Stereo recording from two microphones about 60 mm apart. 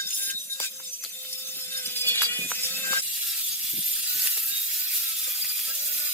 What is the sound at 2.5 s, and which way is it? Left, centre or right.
Music, left.